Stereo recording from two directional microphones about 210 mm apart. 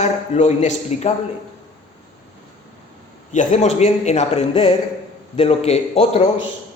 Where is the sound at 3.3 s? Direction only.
35° left (ahead or behind).